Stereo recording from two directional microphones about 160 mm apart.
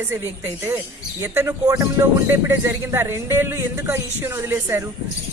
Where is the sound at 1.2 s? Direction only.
15° right (ahead or behind).